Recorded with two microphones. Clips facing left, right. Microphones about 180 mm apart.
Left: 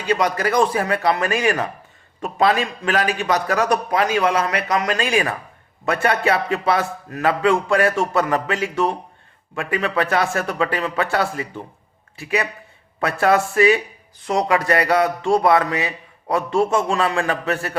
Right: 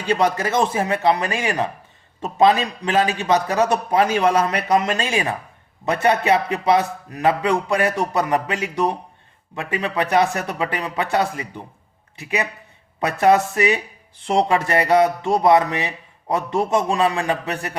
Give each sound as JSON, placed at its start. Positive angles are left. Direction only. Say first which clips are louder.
{"t": 0.1, "sound": "a man's voice", "louder": "even", "side_deg": -25}